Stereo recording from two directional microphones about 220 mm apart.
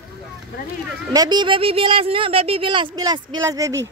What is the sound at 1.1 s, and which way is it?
Speech, 20° right (ahead or behind).